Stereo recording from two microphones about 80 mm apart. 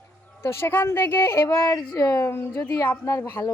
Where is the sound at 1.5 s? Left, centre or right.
Left.